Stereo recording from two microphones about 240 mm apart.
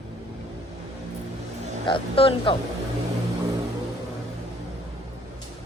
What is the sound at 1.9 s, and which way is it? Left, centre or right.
Speech, left.